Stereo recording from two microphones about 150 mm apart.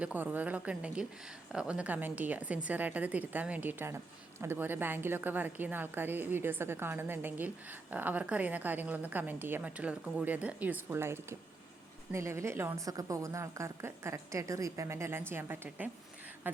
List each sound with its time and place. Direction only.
0.0 s a woman's voice: 10° right (ahead or behind)